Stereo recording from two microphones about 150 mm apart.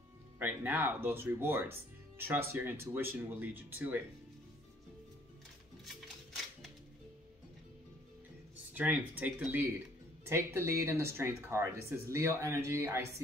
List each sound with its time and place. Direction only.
0.4 s speech: 10° right (ahead or behind)
5.9 s a sound: centre (ahead or behind)
8.7 s speech: 10° right (ahead or behind)